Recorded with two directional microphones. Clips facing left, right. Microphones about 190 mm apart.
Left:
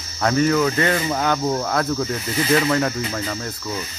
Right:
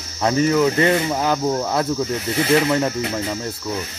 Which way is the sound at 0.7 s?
25° right (ahead or behind).